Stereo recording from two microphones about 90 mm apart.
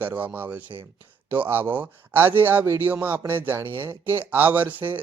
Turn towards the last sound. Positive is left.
turn(degrees=-20)  # may be behind; listen again after turning